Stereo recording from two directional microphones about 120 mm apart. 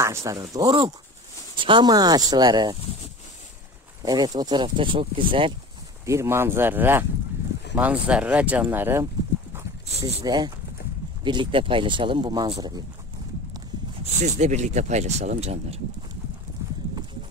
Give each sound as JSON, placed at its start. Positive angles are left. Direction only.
{"t": 0.0, "sound": "speech", "side_deg": -25}
{"t": 4.0, "sound": "speech", "side_deg": -30}
{"t": 6.0, "sound": "speech", "side_deg": -25}
{"t": 10.0, "sound": "speech", "side_deg": -35}
{"t": 14.2, "sound": "speech", "side_deg": -75}